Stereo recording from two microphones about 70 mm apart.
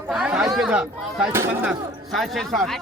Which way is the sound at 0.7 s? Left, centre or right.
Centre.